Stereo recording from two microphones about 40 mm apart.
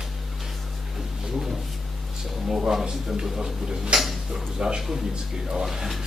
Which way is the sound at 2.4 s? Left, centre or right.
Centre.